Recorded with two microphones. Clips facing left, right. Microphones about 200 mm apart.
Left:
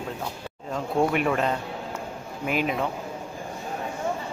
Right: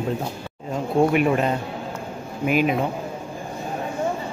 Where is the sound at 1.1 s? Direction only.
10° right (ahead or behind).